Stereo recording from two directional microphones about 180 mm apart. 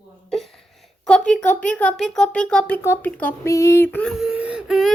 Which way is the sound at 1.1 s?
5° left (ahead or behind).